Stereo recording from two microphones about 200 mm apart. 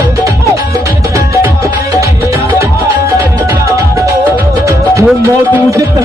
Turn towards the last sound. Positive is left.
turn(degrees=-15)  # may be behind; listen again after turning